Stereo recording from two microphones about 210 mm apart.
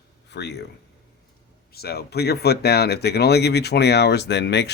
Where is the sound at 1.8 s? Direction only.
50° left (ahead or behind).